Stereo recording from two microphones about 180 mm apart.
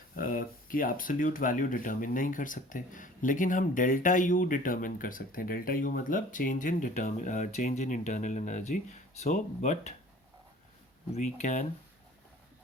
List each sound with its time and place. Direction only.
0.2 s speech: 50° left (ahead or behind)
11.1 s speech: 40° left (ahead or behind)